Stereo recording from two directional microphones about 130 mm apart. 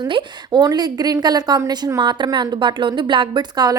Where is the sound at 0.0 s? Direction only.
35° right (ahead or behind).